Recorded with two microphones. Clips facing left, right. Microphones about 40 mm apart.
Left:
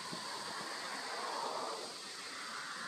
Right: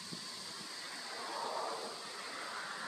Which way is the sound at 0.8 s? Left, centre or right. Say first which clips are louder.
Left 3 dB; centre.